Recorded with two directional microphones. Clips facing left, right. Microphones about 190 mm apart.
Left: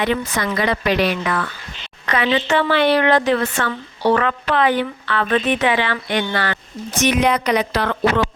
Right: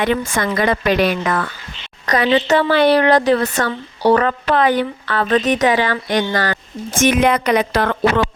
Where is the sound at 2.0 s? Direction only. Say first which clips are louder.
Right 4 dB; 40° right (ahead or behind).